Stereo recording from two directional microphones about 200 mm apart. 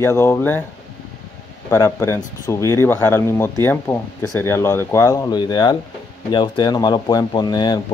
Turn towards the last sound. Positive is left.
turn(degrees=20)  # may be behind; listen again after turning